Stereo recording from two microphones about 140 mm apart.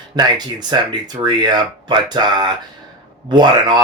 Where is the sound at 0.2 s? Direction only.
30° right (ahead or behind).